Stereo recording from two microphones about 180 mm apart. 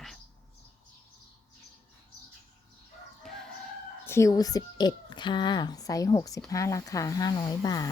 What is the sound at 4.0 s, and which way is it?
A child's voice, 15° left (ahead or behind).